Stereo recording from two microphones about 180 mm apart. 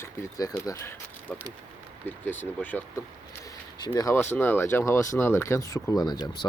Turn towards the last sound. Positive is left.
turn(degrees=25)  # may be behind; listen again after turning